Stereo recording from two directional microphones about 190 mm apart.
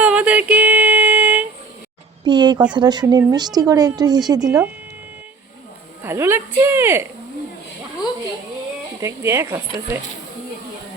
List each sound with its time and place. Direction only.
0.0 s a sound: 5° right (ahead or behind)
2.2 s a woman's voice: 25° right (ahead or behind)
6.0 s a woman's voice: 15° right (ahead or behind)
9.0 s speech: 15° right (ahead or behind)